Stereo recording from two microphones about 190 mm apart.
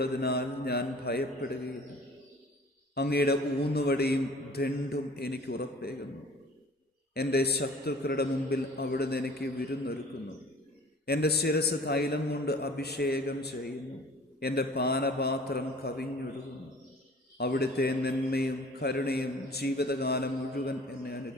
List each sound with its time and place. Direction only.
0.0 s a man's voice: 55° left (ahead or behind)
2.9 s a man's voice: 55° left (ahead or behind)
7.1 s a man's voice: 55° left (ahead or behind)
11.0 s a man's voice: 55° left (ahead or behind)
17.3 s a man's voice: 55° left (ahead or behind)